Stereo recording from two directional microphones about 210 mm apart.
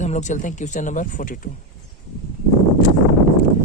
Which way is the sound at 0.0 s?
35° left (ahead or behind).